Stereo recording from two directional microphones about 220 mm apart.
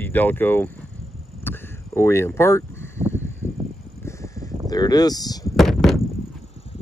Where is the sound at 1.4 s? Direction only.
10° left (ahead or behind).